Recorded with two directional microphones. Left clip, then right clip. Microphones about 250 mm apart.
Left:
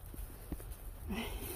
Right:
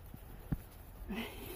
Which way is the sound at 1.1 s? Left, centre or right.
Centre.